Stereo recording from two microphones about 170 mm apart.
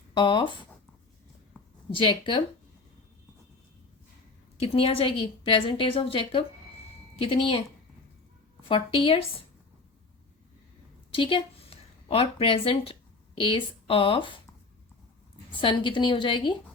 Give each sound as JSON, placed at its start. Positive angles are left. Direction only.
{"t": 0.1, "sound": "a woman's voice", "side_deg": 30}
{"t": 1.5, "sound": "a sound", "side_deg": 5}
{"t": 2.0, "sound": "a woman's voice", "side_deg": 30}
{"t": 4.6, "sound": "a woman's voice", "side_deg": 35}
{"t": 8.6, "sound": "a woman's voice", "side_deg": 30}
{"t": 11.1, "sound": "a woman's voice", "side_deg": 30}
{"t": 15.6, "sound": "a woman's voice", "side_deg": 30}